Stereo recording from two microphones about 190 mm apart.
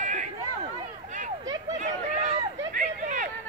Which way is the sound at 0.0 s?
40° right (ahead or behind).